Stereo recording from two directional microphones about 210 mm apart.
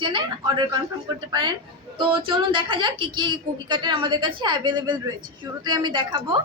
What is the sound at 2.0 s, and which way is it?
A woman's voice, 25° right (ahead or behind).